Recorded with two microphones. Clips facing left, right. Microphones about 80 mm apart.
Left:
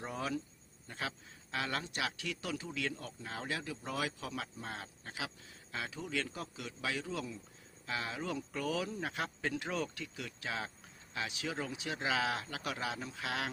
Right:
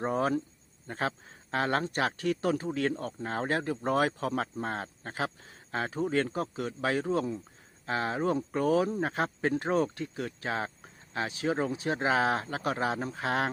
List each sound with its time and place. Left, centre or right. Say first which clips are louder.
0.0 s speech: right 10 dB; right